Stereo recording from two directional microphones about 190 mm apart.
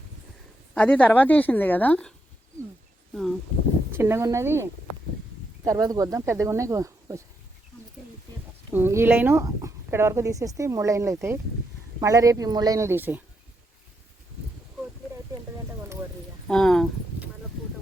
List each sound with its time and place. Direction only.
0.7 s a woman's voice: 10° left (ahead or behind)
3.9 s speech: 15° right (ahead or behind)
8.7 s speech: 10° right (ahead or behind)
16.5 s a sound: centre (ahead or behind)